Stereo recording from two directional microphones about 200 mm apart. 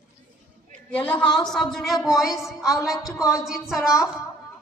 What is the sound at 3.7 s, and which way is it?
Speech, 15° left (ahead or behind).